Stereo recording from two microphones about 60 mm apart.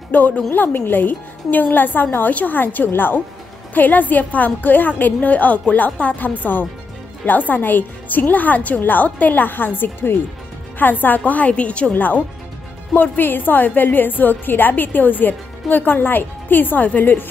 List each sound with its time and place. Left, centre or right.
0.1 s a woman's voice: left